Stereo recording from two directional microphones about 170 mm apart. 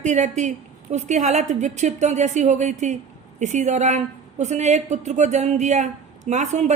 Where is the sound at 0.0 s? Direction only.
45° right (ahead or behind).